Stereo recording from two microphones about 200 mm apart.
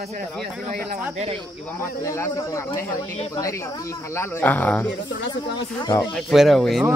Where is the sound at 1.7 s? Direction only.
15° left (ahead or behind).